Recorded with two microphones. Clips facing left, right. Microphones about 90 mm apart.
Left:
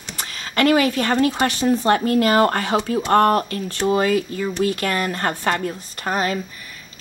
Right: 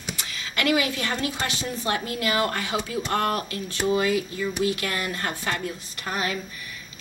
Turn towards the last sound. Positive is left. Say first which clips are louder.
# left 6 dB
turn(degrees=40)  # may be behind; listen again after turning